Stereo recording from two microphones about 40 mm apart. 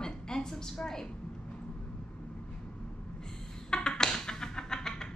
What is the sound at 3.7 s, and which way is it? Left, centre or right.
Music, centre.